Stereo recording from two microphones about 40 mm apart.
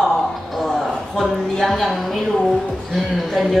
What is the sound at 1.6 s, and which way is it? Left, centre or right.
Speech, centre.